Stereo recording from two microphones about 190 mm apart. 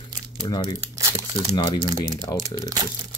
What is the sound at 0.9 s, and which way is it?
Speech, 15° right (ahead or behind).